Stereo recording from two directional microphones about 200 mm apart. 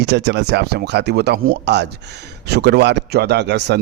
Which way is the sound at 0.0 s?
60° right (ahead or behind).